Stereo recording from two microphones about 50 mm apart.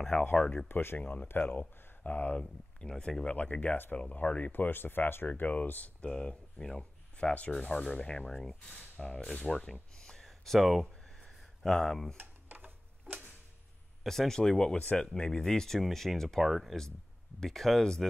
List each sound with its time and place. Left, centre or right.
0.2 s speech: left
0.7 s speech: left
0.9 s speech: left
2.8 s speech: centre
3.3 s speech: left
4.5 s speech: left
5.5 s speech: left
6.0 s speech: centre
8.3 s speech: centre
8.5 s speech: left; by 10.9 s centre
11.1 s a sound: centre
12.2 s tick-tock: right
14.0 s speech: centre